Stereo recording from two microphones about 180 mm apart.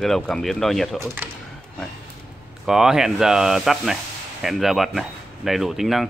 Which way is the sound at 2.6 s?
5° right (ahead or behind).